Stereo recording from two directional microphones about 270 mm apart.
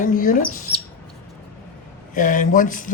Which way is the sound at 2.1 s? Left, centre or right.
Left.